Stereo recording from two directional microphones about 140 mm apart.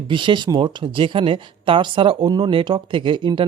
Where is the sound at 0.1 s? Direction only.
35° right (ahead or behind).